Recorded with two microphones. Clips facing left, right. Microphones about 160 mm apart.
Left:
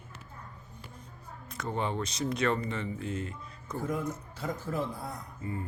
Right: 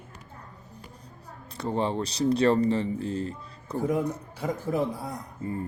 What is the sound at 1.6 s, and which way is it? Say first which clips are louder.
Speech: right 5 dB; 30° right (ahead or behind).